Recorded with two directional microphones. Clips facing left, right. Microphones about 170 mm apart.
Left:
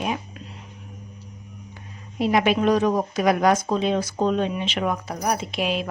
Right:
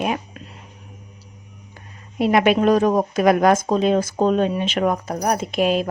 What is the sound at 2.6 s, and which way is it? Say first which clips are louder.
Speech: right 3 dB; 45° right (ahead or behind).